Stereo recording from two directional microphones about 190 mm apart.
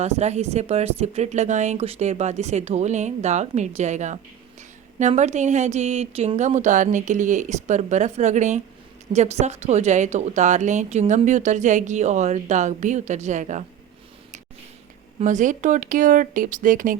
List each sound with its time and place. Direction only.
0.0 s a woman's voice: 35° right (ahead or behind)
15.2 s speech: 40° right (ahead or behind)